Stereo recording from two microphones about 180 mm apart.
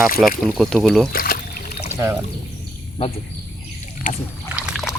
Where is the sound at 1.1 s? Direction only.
55° left (ahead or behind).